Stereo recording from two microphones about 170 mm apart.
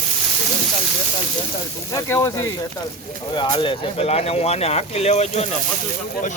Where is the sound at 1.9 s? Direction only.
20° left (ahead or behind); by 5.5 s 40° left (ahead or behind).